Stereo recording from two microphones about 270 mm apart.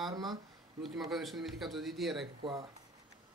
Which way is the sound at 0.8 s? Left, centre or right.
Centre.